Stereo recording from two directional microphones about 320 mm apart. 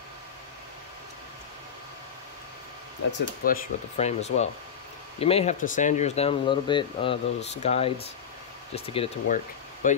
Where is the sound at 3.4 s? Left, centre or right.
Left.